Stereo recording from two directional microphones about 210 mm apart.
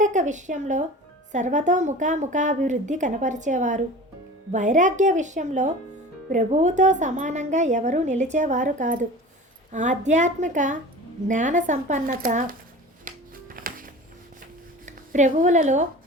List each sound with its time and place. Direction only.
0.0 s a woman's voice: 35° right (ahead or behind)
13.1 s music: 40° right (ahead or behind)
14.8 s speech: 35° right (ahead or behind)